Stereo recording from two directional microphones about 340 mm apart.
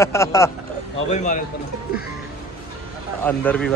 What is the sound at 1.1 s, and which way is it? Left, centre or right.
Speech, left.